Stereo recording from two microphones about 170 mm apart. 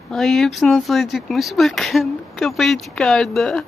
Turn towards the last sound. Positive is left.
turn(degrees=0)  # may be behind; listen again after turning